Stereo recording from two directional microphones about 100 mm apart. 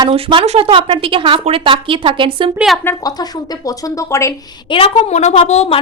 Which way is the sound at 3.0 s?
40° left (ahead or behind).